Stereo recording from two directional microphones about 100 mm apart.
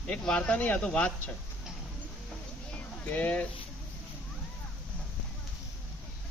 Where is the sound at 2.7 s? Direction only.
15° left (ahead or behind).